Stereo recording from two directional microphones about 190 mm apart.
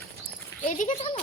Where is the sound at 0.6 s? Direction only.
40° left (ahead or behind).